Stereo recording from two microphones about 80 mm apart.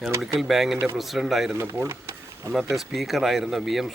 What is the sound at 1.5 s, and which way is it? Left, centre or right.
Speech, right.